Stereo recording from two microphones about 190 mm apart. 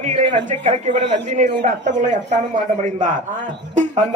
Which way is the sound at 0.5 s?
40° right (ahead or behind).